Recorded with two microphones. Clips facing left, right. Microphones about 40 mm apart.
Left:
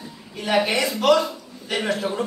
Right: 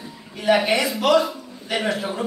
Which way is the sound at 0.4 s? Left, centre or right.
Centre.